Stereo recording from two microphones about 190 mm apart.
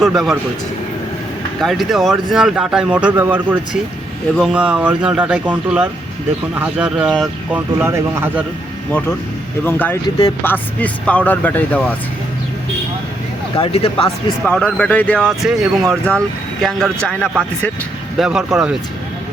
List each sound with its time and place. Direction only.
1.6 s speech: centre (ahead or behind)
8.9 s speech: 10° left (ahead or behind)
13.6 s speech: 30° left (ahead or behind)
14.4 s speech: 5° left (ahead or behind)
15.2 s speech: 10° right (ahead or behind)
15.9 s speech: 5° left (ahead or behind)